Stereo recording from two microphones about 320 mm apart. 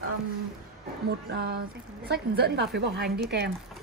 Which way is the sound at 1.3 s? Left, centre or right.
Right.